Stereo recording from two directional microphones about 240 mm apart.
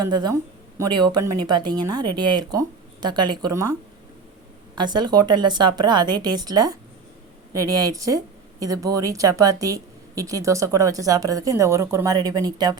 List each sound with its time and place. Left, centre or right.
0.0 s a woman's voice: centre